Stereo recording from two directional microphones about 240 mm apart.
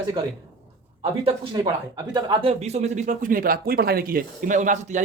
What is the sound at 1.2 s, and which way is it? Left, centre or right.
Speech, centre.